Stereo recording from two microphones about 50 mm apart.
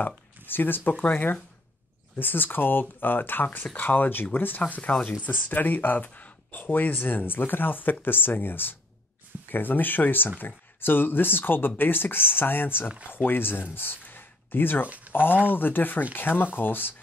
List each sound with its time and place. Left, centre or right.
0.5 s speech: left
6.7 s speech: left
13.7 s a sound: left
14.9 s speech: right
15.5 s speech: left